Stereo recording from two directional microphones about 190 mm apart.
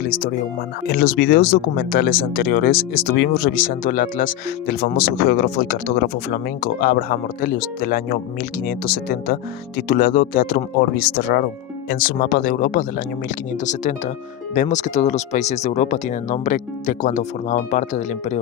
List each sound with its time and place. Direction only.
0.0 s speech: 50° left (ahead or behind)
14.5 s speech: 40° left (ahead or behind)